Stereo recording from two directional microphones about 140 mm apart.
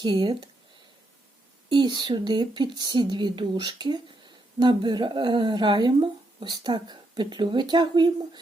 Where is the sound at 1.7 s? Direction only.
35° right (ahead or behind).